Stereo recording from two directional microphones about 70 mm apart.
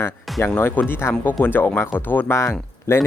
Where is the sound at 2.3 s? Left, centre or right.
Left.